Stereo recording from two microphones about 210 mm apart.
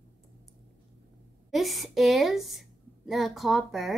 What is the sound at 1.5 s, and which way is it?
A woman's voice, centre (ahead or behind).